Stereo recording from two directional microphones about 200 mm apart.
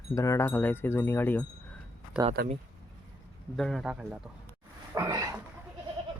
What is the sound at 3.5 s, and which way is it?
Speech, centre (ahead or behind).